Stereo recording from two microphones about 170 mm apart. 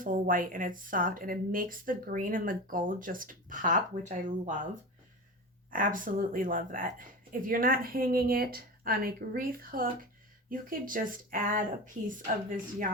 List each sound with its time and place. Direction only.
0.0 s speech: 55° right (ahead or behind)
5.7 s speech: 50° right (ahead or behind)